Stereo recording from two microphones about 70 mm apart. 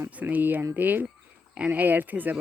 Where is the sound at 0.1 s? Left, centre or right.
Right.